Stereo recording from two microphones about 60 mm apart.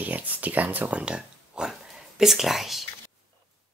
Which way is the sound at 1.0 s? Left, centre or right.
Centre.